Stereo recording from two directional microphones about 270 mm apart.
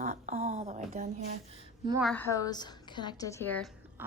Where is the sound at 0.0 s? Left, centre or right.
Right.